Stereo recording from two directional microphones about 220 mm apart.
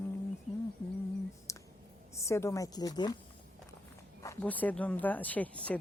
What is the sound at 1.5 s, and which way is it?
Clicking, 15° left (ahead or behind).